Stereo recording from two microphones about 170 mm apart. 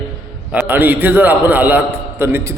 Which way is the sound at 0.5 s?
10° right (ahead or behind).